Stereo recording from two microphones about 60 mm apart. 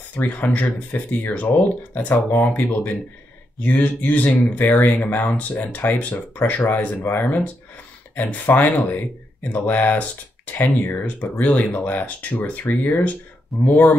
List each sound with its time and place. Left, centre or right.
0.1 s speech: left
10.5 s speech: left
11.3 s speech: left
13.5 s speech: centre